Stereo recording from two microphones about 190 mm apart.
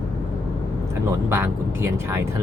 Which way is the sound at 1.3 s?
10° right (ahead or behind).